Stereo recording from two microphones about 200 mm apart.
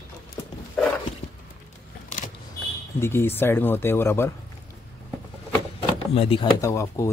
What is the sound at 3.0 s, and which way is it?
Speech, 10° left (ahead or behind).